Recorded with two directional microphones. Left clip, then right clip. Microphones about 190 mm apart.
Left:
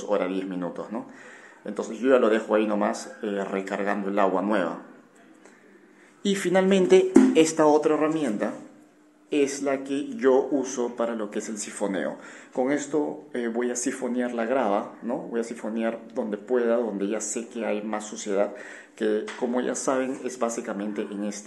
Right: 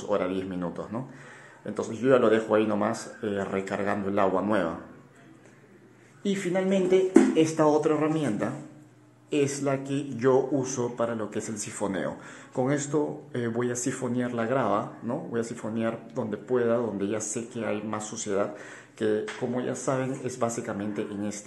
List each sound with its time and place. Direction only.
0.1 s speech: 5° left (ahead or behind)
6.2 s speech: 25° left (ahead or behind); by 21.4 s 10° left (ahead or behind)